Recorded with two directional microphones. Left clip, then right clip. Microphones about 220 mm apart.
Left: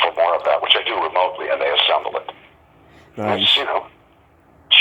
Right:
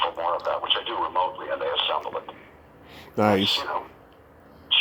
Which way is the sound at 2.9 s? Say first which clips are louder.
Right 2 dB; 5° right (ahead or behind).